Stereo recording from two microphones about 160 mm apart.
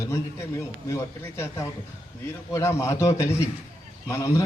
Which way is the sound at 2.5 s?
20° left (ahead or behind).